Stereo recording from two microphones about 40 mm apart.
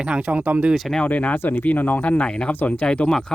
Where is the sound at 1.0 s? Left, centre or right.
Left.